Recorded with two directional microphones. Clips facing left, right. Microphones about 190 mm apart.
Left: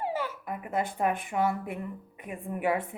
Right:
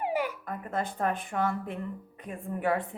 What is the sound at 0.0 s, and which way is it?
Babbling, 15° right (ahead or behind).